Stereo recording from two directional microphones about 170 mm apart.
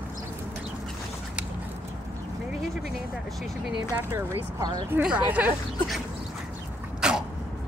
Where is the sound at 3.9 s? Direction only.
15° right (ahead or behind).